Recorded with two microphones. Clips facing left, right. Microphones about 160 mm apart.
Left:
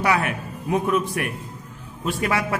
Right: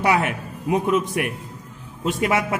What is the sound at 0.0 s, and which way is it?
A man's voice, 20° right (ahead or behind).